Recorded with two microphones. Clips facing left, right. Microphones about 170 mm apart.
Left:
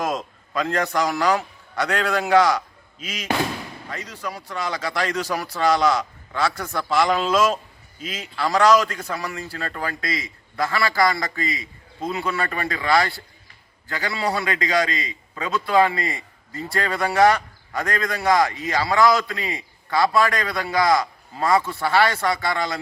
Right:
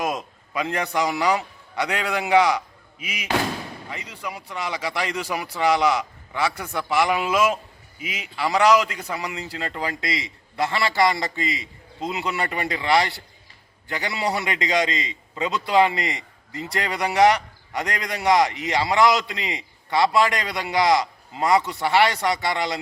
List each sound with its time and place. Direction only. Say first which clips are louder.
0.5 s a man's voice: left 2 dB; 15° right (ahead or behind)